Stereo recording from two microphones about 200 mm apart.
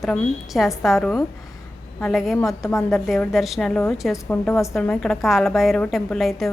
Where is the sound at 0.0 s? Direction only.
Centre (ahead or behind).